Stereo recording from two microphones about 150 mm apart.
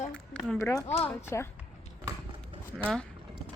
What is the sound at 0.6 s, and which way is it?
Speech, 20° left (ahead or behind).